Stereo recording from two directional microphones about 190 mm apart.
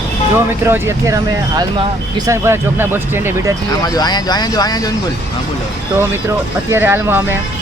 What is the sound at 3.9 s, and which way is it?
Speech, 20° left (ahead or behind).